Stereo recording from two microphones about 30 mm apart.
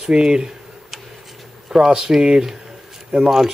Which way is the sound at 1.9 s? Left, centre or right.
Right.